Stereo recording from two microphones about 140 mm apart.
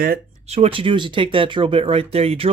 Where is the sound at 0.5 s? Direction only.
45° right (ahead or behind).